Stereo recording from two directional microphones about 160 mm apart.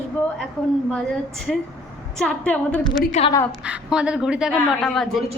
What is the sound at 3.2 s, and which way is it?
Speech, 45° left (ahead or behind).